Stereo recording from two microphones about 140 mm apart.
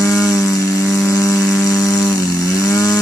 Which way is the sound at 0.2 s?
25° left (ahead or behind).